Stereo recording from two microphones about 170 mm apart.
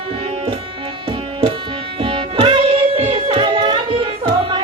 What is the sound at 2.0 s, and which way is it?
Music, 30° right (ahead or behind).